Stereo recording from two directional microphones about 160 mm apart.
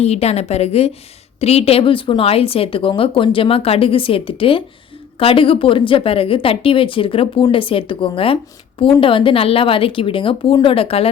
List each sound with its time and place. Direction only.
0.0 s speech: 40° left (ahead or behind)